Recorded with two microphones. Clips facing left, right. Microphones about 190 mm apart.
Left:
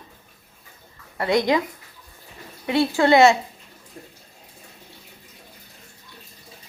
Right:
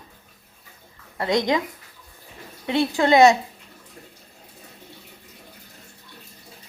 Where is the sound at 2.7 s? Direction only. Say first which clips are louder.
Left 1 dB; 20° right (ahead or behind).